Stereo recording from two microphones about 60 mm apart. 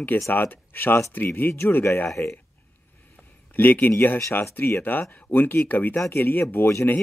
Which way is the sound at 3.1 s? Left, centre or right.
Left.